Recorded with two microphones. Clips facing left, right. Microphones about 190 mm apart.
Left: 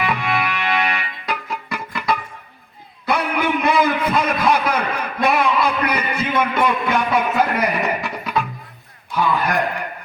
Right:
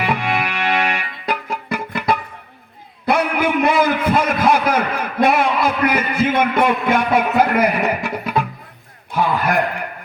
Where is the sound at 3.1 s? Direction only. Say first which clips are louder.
Right 3 dB; 45° right (ahead or behind).